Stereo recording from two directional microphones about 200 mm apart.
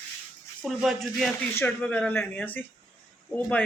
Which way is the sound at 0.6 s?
Centre (ahead or behind).